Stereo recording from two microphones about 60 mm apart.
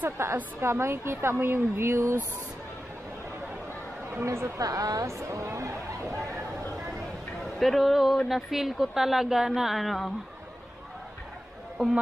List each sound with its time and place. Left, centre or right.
0.2 s speech: right
4.1 s speech: right
4.6 s a woman's voice: right
7.5 s a woman's voice: centre